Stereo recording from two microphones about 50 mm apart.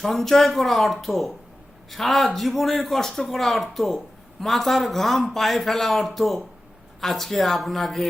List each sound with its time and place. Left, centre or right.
0.0 s speech: centre